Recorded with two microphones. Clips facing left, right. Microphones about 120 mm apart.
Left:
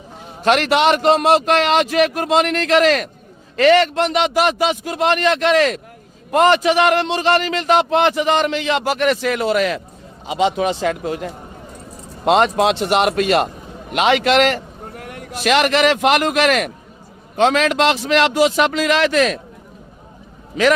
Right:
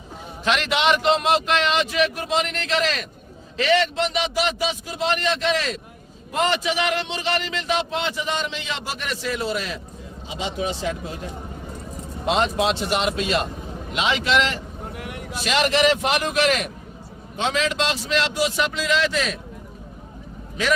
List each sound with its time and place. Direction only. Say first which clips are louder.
0.4 s a man's voice: left 6 dB; 45° left (ahead or behind); by 14.6 s 60° left (ahead or behind)
14.9 s vehicle: left 2 dB; 45° left (ahead or behind)
15.4 s a man's voice: left 5 dB; 60° left (ahead or behind)